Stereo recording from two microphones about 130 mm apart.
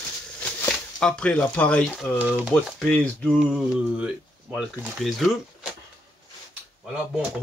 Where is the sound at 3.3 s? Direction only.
5° right (ahead or behind).